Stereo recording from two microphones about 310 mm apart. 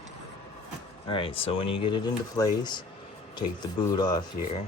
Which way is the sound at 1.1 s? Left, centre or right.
Centre.